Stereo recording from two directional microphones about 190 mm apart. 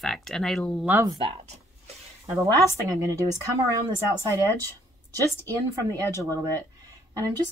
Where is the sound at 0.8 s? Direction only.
15° right (ahead or behind).